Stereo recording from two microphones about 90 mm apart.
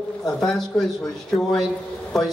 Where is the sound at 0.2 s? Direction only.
5° left (ahead or behind).